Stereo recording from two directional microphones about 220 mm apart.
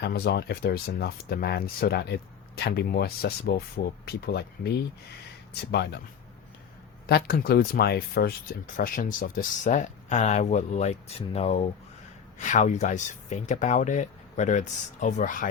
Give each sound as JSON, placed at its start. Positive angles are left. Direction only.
{"t": 0.0, "sound": "speech", "side_deg": 45}
{"t": 5.7, "sound": "speech", "side_deg": 50}
{"t": 7.1, "sound": "speech", "side_deg": 45}